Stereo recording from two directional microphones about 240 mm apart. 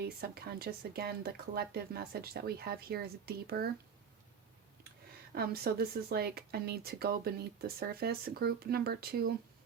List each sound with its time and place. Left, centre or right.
0.0 s speech: right
5.3 s speech: right